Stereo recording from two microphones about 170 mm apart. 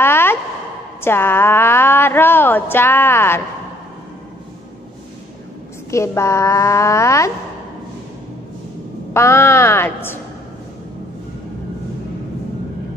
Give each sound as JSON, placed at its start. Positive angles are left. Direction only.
{"t": 0.0, "sound": "a sound", "side_deg": 15}
{"t": 1.0, "sound": "a woman's voice", "side_deg": 15}
{"t": 5.9, "sound": "a woman's voice", "side_deg": 15}
{"t": 9.1, "sound": "a woman's voice", "side_deg": 15}